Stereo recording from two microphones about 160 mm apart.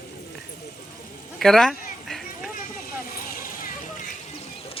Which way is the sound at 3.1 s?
65° left (ahead or behind).